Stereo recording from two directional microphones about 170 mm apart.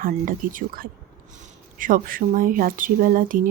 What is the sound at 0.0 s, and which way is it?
Speech, 55° right (ahead or behind).